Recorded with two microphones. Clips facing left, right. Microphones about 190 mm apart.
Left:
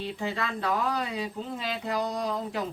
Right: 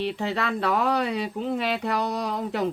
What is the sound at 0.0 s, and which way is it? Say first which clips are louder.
Speech: right 5 dB; 70° right (ahead or behind).